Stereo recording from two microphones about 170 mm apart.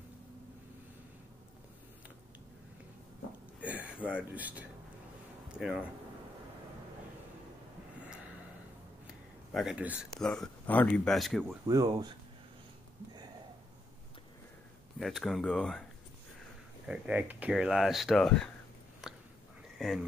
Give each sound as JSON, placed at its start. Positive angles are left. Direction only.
{"t": 3.6, "sound": "speech", "side_deg": -10}
{"t": 9.5, "sound": "speech", "side_deg": 0}
{"t": 10.2, "sound": "speech", "side_deg": 5}
{"t": 11.6, "sound": "speech", "side_deg": -20}
{"t": 15.0, "sound": "speech", "side_deg": 0}
{"t": 16.8, "sound": "speech", "side_deg": -5}
{"t": 19.0, "sound": "biting", "side_deg": 0}
{"t": 19.8, "sound": "speech", "side_deg": 0}